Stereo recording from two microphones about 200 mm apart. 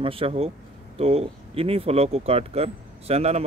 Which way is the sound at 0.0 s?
30° right (ahead or behind).